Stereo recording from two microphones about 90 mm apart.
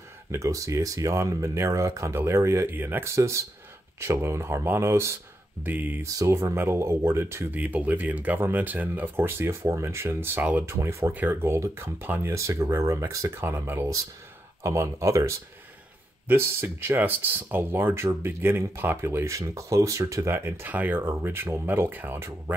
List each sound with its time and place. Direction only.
0.3 s speech: 35° right (ahead or behind)
5.6 s speech: 20° right (ahead or behind)
6.0 s speech: 35° right (ahead or behind)
7.5 s speech: 20° right (ahead or behind); by 13.3 s 35° right (ahead or behind)
13.4 s speech: 25° right (ahead or behind)